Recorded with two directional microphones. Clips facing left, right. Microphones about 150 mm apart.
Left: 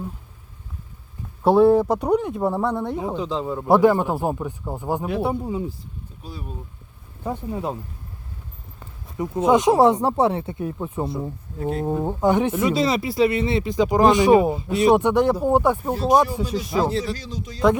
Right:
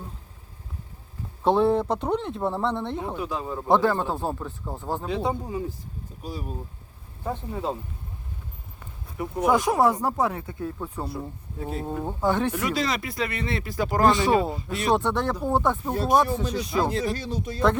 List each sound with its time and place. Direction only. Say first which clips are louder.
1.5 s speech: left 6 dB; 5° left (ahead or behind)
3.2 s speech: left 4 dB; 10° right (ahead or behind)
3.4 s speech: left 6 dB; 10° left (ahead or behind)
7.3 s speech: left 2 dB; 15° left (ahead or behind)
9.1 s speech: left 4 dB; 20° left (ahead or behind)
11.6 s speech: left 7 dB; centre (ahead or behind)
11.9 s speech: left 5 dB; 15° left (ahead or behind); by 16.9 s centre (ahead or behind)
16.9 s speech: left 1 dB; 50° right (ahead or behind)